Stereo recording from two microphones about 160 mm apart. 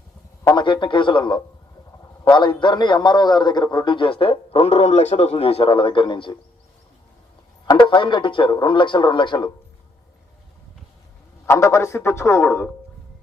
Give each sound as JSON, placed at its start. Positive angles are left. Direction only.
{"t": 0.4, "sound": "a man's voice", "side_deg": 30}
{"t": 7.7, "sound": "a man's voice", "side_deg": 30}
{"t": 11.4, "sound": "a man's voice", "side_deg": 15}